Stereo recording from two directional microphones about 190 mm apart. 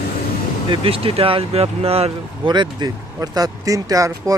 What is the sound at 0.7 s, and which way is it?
Speech, 30° right (ahead or behind).